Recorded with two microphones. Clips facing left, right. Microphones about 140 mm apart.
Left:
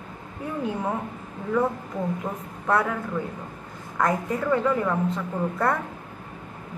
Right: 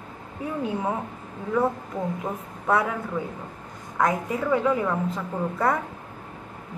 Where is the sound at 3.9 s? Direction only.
5° right (ahead or behind).